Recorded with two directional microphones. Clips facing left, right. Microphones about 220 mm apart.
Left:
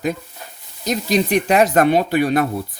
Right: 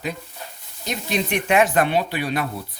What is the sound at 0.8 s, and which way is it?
Speech, 35° left (ahead or behind).